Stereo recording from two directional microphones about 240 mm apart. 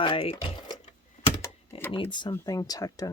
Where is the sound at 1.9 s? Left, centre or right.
Centre.